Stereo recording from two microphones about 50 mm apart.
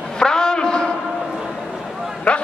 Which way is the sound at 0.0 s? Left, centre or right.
Centre.